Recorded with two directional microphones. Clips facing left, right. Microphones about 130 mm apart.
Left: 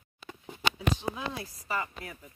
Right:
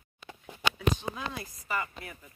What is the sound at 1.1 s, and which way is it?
Speech, 5° left (ahead or behind).